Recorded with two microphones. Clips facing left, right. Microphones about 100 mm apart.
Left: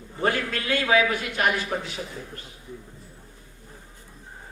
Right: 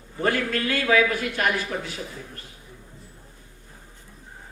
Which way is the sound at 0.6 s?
20° left (ahead or behind).